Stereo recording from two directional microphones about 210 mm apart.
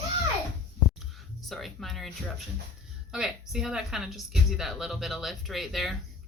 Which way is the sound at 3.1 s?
5° right (ahead or behind).